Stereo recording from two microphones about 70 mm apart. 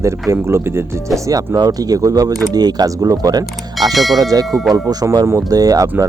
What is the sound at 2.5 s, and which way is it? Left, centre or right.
Speech, right.